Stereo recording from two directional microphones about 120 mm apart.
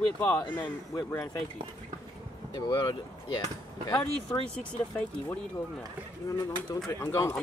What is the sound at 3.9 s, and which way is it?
Speech, 10° left (ahead or behind).